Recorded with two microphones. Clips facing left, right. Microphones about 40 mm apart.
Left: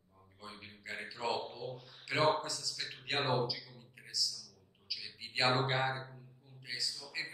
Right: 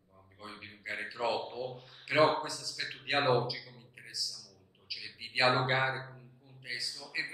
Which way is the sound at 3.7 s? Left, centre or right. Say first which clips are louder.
Left 1 dB; centre.